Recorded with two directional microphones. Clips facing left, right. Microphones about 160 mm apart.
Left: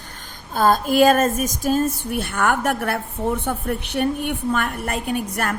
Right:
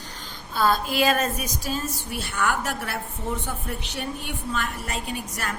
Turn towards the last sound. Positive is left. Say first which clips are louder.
# left 8 dB
turn(degrees=55)  # may be behind; listen again after turning